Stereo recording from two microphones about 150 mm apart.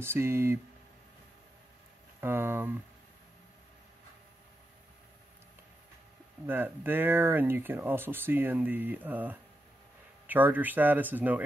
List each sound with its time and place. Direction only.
0.0 s speech: 15° right (ahead or behind)
2.1 s speech: 15° right (ahead or behind)
6.4 s speech: 15° right (ahead or behind)